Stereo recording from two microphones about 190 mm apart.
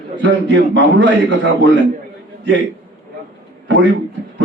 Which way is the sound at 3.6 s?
75° right (ahead or behind).